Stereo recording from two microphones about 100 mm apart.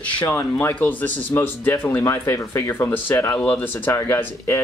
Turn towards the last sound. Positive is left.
turn(degrees=25)  # may be behind; listen again after turning